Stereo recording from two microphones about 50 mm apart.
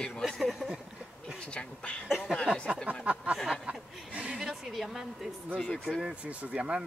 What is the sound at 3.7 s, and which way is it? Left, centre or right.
Chuckle, right.